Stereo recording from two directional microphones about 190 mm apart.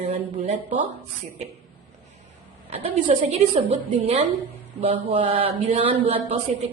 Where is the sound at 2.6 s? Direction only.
30° right (ahead or behind).